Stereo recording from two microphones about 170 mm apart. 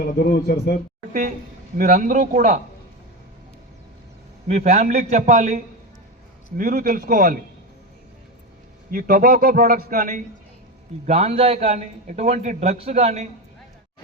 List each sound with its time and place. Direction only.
0.0 s speech: 70° left (ahead or behind)
1.7 s a man's voice: 55° right (ahead or behind)
4.4 s a man's voice: 40° right (ahead or behind)
6.6 s a man's voice: 55° right (ahead or behind)
8.9 s a man's voice: 55° right (ahead or behind)
11.0 s a man's voice: 40° right (ahead or behind)